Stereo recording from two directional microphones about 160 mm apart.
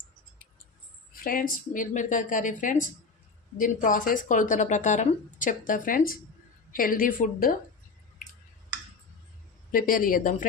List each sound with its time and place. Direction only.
1.1 s speech: 60° left (ahead or behind)
9.7 s speech: 60° left (ahead or behind)